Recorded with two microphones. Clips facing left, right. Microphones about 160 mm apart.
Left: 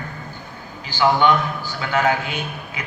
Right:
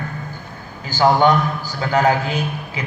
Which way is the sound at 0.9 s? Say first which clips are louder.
Right 3 dB; 40° right (ahead or behind).